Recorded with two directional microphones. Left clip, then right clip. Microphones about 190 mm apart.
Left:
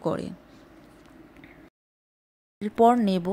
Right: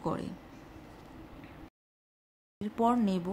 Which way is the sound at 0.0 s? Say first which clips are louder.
Left 7 dB; 35° left (ahead or behind).